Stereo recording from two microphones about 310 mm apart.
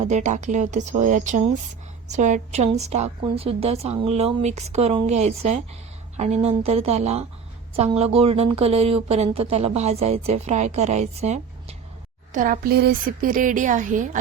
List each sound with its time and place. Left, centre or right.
0.0 s a woman's voice: right